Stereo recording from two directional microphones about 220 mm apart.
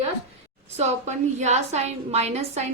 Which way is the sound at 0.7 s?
30° right (ahead or behind).